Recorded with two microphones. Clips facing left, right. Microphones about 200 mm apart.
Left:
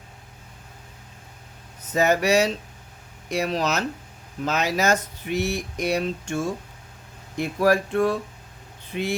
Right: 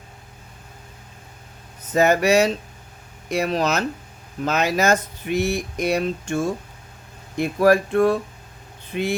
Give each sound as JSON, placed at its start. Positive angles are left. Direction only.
{"t": 1.9, "sound": "speech", "side_deg": -55}